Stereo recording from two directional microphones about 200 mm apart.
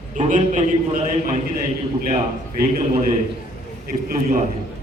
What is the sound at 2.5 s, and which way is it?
Speech, 45° right (ahead or behind).